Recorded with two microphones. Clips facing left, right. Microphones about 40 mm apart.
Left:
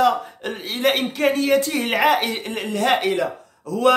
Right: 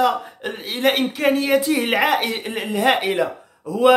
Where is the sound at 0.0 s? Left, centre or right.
Centre.